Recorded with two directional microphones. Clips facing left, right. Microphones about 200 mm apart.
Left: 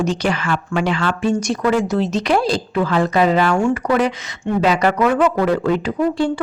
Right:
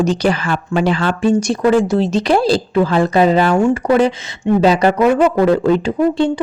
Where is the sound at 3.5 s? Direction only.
20° right (ahead or behind).